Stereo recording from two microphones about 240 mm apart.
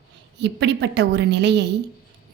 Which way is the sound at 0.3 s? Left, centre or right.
Right.